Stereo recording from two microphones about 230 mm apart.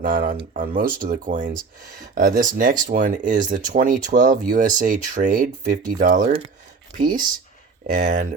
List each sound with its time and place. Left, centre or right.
0.0 s speech: right